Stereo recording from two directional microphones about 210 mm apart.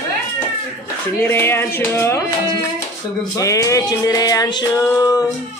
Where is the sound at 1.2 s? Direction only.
10° left (ahead or behind).